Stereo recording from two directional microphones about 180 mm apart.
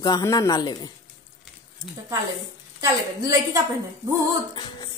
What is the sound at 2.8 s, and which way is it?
Speech, 20° right (ahead or behind).